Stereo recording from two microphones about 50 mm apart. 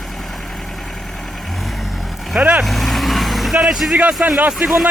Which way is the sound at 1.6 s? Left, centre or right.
Centre.